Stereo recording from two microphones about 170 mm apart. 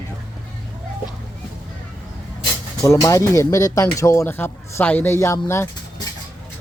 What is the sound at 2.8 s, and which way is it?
Speech, 20° left (ahead or behind).